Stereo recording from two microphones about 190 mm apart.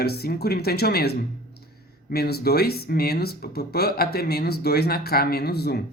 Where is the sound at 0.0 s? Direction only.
55° left (ahead or behind).